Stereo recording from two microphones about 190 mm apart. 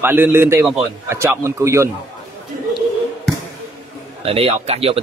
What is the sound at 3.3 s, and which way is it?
Basketball bounce, 5° left (ahead or behind).